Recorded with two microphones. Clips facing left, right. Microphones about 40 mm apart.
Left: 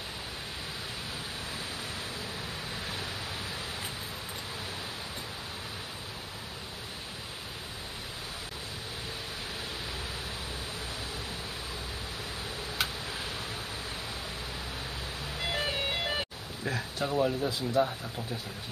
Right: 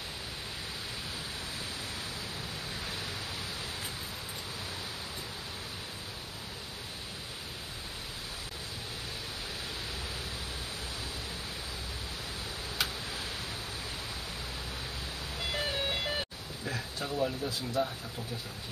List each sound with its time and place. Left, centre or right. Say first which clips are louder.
15.5 s ice cream truck: left 1 dB; left
17.2 s speech: left 3 dB; left